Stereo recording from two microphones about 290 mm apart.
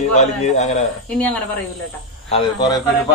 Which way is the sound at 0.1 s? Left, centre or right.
Left.